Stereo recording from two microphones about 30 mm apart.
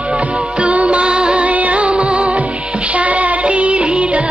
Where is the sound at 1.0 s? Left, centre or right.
Right.